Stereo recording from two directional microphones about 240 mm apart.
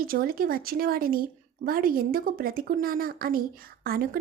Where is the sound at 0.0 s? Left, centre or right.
Right.